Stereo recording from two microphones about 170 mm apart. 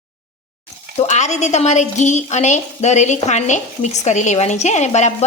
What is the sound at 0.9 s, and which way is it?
Speech, 45° left (ahead or behind).